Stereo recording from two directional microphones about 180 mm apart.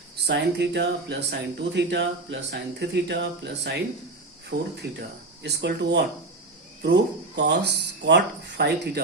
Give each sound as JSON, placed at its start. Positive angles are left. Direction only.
{"t": 0.3, "sound": "speech", "side_deg": -70}